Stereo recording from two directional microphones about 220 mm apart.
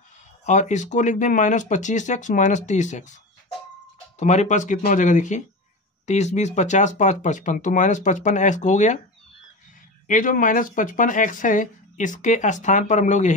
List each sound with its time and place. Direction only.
0.5 s speech: 35° left (ahead or behind)
4.2 s speech: 30° left (ahead or behind)
10.0 s speech: 35° left (ahead or behind)